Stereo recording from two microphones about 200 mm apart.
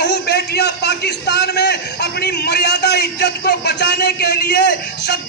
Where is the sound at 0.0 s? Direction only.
55° left (ahead or behind).